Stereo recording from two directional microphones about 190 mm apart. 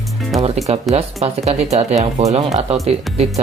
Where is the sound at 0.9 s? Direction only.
35° right (ahead or behind).